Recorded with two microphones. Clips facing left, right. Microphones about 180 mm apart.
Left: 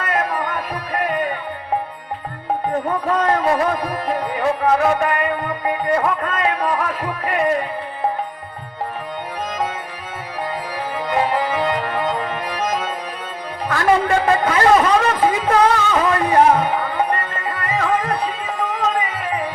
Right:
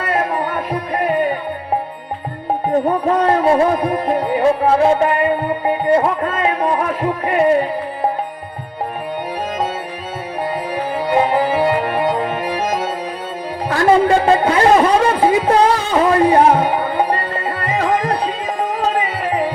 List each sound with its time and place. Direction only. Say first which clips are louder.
0.0 s music: right 3 dB; 30° right (ahead or behind)
2.6 s music: right 6 dB; 30° right (ahead or behind)
10.9 s music: right 4 dB; 35° right (ahead or behind)
13.7 s a man's voice: right 4 dB; 30° right (ahead or behind)
16.6 s music: right 3 dB; 25° right (ahead or behind)